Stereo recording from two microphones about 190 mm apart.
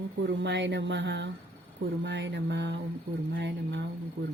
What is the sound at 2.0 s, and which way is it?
Mantra, 65° right (ahead or behind).